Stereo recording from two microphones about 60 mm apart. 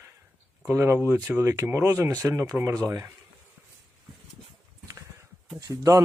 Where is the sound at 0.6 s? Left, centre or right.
Right.